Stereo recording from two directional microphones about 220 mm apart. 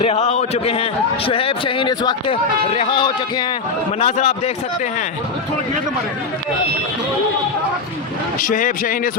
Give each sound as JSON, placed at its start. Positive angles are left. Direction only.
{"t": 0.0, "sound": "a man's voice", "side_deg": 30}
{"t": 8.4, "sound": "speech", "side_deg": 40}